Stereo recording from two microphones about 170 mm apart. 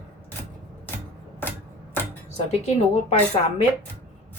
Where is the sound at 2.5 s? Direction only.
40° left (ahead or behind).